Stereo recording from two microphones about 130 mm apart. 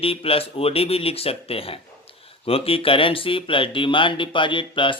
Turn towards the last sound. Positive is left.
turn(degrees=40)  # may be behind; listen again after turning